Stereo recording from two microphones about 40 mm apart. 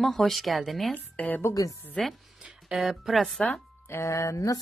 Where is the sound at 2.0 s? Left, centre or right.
Centre.